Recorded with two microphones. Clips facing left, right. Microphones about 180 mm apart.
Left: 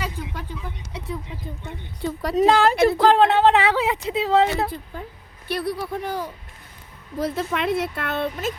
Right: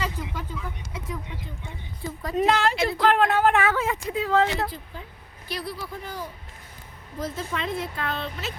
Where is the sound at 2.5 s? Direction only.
55° left (ahead or behind).